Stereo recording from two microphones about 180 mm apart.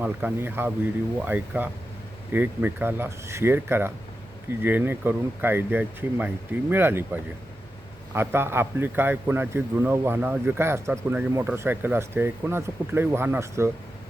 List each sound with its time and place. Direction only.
0.0 s a man's voice: 10° right (ahead or behind)